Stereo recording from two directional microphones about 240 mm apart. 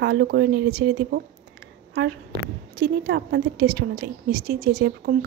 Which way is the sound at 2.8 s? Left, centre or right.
Right.